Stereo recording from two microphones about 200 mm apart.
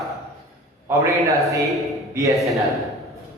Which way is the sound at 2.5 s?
Centre (ahead or behind).